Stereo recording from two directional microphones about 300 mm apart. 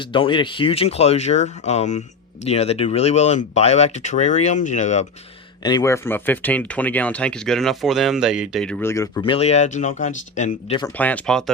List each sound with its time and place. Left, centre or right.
0.0 s speech: centre
5.6 s speech: centre